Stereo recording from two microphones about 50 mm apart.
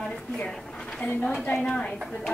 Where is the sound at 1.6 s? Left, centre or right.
Centre.